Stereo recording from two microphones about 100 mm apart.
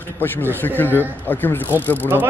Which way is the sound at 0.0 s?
20° left (ahead or behind).